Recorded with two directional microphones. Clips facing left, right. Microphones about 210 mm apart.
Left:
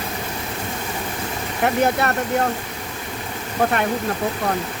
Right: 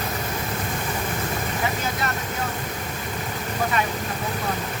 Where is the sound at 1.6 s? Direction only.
65° left (ahead or behind).